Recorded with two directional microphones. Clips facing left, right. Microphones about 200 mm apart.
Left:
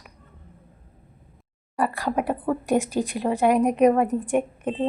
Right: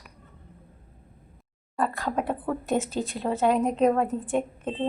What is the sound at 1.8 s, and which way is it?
Speech, 10° left (ahead or behind).